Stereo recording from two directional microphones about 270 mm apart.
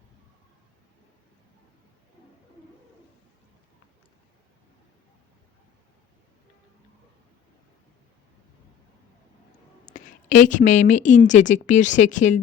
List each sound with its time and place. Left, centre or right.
9.8 s a woman's voice: left